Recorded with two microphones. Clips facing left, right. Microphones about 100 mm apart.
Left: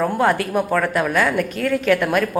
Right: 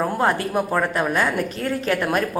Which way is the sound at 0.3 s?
30° right (ahead or behind).